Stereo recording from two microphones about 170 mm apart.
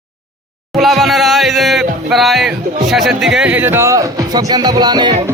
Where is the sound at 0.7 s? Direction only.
Centre (ahead or behind); by 5.1 s 25° right (ahead or behind).